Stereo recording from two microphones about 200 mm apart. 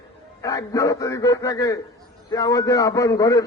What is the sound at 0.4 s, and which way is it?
A man's voice, 15° left (ahead or behind).